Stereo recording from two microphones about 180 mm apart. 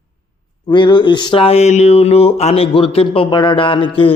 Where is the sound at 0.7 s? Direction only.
25° left (ahead or behind).